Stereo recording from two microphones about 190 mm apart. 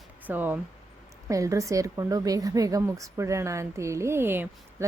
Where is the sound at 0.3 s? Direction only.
10° right (ahead or behind).